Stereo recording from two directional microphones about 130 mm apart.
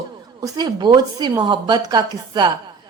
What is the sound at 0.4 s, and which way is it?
A woman's voice, 30° right (ahead or behind).